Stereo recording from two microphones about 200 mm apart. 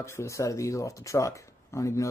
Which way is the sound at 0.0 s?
15° left (ahead or behind).